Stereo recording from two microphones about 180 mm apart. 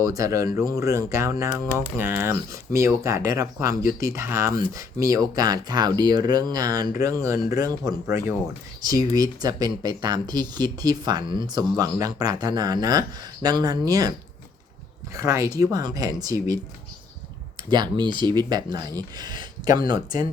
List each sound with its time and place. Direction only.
0.0 s speech: 20° right (ahead or behind)
15.1 s speech: 15° right (ahead or behind)
17.9 s speech: 25° right (ahead or behind)